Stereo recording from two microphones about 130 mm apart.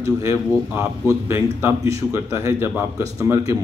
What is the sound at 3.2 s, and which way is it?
Speech, 25° right (ahead or behind).